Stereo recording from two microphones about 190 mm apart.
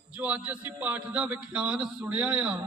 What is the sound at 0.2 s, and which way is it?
A man's voice, 5° right (ahead or behind).